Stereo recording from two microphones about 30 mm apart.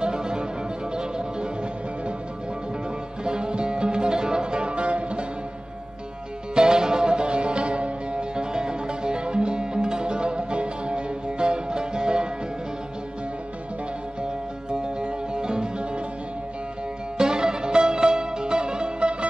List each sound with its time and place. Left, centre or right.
0.0 s music: right
3.3 s music: right
6.5 s music: right
14.7 s music: right
17.2 s music: right